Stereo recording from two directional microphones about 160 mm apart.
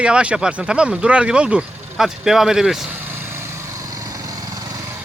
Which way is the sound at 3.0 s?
15° right (ahead or behind).